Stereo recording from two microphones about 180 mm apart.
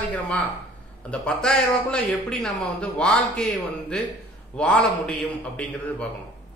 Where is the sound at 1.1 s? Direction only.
5° left (ahead or behind).